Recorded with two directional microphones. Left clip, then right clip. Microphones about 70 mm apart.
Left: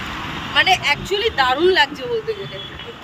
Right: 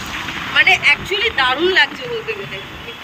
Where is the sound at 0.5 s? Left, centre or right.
Left.